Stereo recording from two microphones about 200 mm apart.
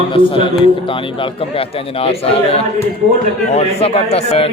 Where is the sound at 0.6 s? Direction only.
25° left (ahead or behind).